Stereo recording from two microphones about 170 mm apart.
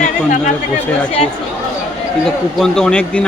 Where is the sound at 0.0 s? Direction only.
45° left (ahead or behind).